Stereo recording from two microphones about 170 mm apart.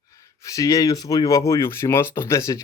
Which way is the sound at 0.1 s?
20° left (ahead or behind).